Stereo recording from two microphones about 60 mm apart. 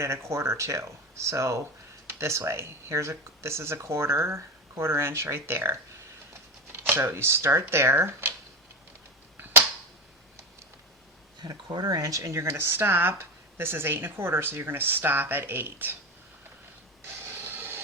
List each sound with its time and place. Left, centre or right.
0.0 s speech: right
6.7 s speech: right
11.9 s speech: right
12.5 s speech: right
17.2 s printer: right